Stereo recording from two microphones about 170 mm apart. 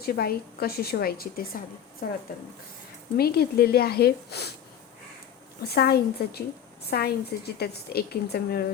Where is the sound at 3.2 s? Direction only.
65° left (ahead or behind).